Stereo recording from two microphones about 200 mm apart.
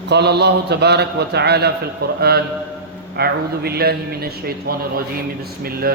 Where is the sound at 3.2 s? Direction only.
50° right (ahead or behind).